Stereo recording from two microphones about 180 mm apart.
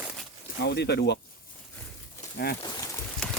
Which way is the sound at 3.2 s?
5° left (ahead or behind).